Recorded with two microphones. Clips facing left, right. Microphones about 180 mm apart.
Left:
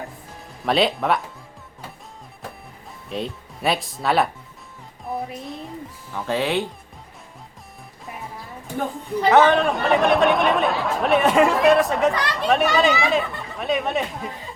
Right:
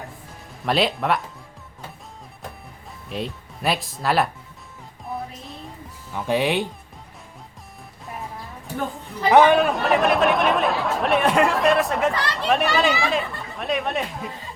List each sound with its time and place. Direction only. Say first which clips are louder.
0.6 s speech: left 2 dB; centre (ahead or behind)
3.1 s speech: left 1 dB; centre (ahead or behind)
6.1 s speech: right 1 dB; 15° right (ahead or behind)
9.3 s speech: right 1 dB; 15° right (ahead or behind)
9.6 s speech: even; centre (ahead or behind)
12.1 s speech: left 2 dB; 15° left (ahead or behind)
12.5 s speech: left 2 dB; centre (ahead or behind)